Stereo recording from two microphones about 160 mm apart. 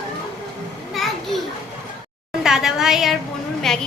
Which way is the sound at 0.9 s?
Centre (ahead or behind).